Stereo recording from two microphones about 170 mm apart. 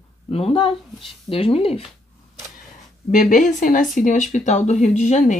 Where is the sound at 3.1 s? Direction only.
50° left (ahead or behind).